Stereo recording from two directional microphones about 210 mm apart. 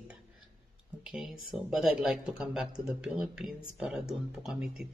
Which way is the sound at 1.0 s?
5° right (ahead or behind).